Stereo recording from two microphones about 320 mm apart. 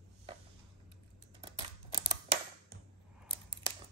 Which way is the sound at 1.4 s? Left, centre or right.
Centre.